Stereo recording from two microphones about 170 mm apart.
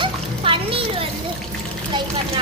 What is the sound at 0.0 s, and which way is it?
Splash, 30° right (ahead or behind).